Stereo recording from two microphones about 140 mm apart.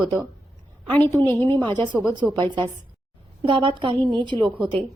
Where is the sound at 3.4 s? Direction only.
35° right (ahead or behind).